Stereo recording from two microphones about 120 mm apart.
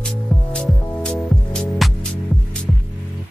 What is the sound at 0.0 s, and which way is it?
Music, 10° left (ahead or behind).